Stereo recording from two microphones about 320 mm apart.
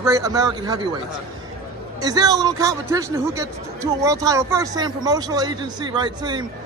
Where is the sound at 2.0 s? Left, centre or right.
Centre.